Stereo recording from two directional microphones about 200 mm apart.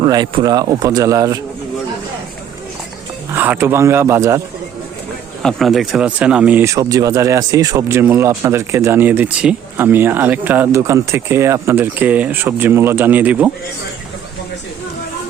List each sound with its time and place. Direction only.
0.0 s speech: 20° right (ahead or behind)
3.3 s speech: 10° right (ahead or behind)
5.4 s speech: centre (ahead or behind)